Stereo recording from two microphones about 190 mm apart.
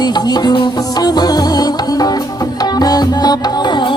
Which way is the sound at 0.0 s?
20° left (ahead or behind).